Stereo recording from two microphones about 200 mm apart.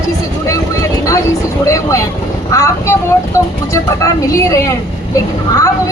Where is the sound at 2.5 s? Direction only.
15° left (ahead or behind).